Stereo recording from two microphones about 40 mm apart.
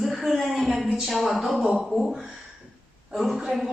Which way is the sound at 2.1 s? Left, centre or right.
Centre.